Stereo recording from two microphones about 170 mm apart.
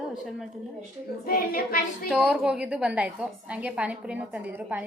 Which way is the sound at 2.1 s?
5° right (ahead or behind).